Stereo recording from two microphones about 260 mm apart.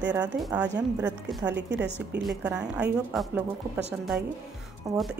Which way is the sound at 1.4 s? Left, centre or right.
Right.